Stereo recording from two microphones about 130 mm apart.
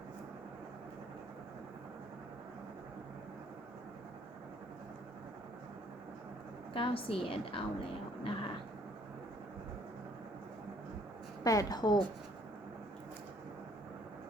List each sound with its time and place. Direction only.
6.7 s a woman's voice: 45° left (ahead or behind)
11.4 s a woman's voice: 30° left (ahead or behind)